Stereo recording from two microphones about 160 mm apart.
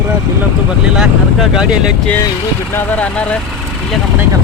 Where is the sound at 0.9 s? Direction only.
5° right (ahead or behind).